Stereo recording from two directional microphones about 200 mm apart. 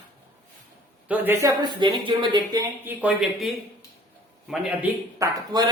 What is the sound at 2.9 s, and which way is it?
Speech, 5° right (ahead or behind).